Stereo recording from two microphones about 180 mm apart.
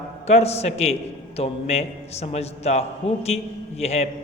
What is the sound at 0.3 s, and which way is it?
A man's voice, 35° left (ahead or behind).